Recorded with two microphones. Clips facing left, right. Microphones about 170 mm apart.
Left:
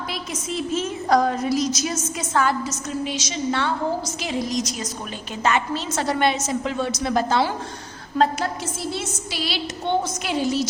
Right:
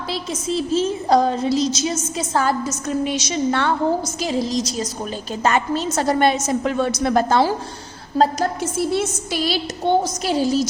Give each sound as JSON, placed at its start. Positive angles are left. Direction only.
{"t": 0.1, "sound": "a woman's voice", "side_deg": -30}
{"t": 3.0, "sound": "a woman's voice", "side_deg": -60}
{"t": 4.2, "sound": "a woman's voice", "side_deg": -35}
{"t": 8.8, "sound": "a woman's voice", "side_deg": -55}